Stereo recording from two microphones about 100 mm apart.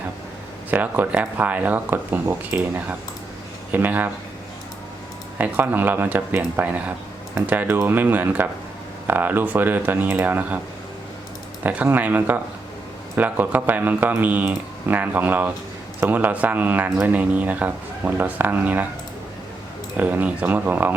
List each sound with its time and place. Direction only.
0.7 s speech: 15° right (ahead or behind)
5.4 s speech: 15° right (ahead or behind)
11.6 s speech: 15° right (ahead or behind)
20.0 s speech: 15° right (ahead or behind)